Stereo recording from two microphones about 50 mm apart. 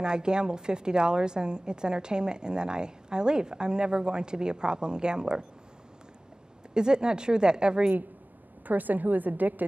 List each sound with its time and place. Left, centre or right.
0.0 s a woman's voice: centre
6.7 s a woman's voice: centre
8.6 s a woman's voice: right